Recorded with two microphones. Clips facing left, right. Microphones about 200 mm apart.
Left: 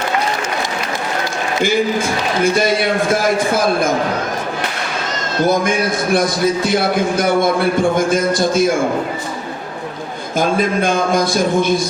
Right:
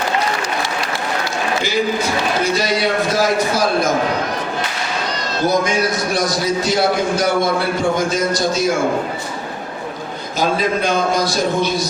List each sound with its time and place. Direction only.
1.6 s a man's voice: 50° left (ahead or behind)
6.1 s a man's voice: 55° left (ahead or behind)
10.3 s a man's voice: 50° left (ahead or behind)